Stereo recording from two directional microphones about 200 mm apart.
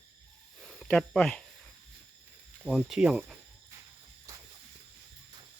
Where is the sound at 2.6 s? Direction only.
Centre (ahead or behind).